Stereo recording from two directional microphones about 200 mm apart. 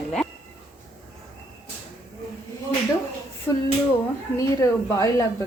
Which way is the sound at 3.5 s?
10° left (ahead or behind).